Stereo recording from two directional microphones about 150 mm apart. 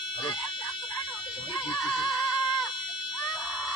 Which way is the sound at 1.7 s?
5° left (ahead or behind).